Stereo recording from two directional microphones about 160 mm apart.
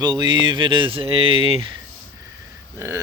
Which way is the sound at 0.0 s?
25° right (ahead or behind).